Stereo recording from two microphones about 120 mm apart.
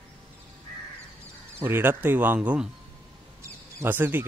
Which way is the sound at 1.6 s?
20° right (ahead or behind).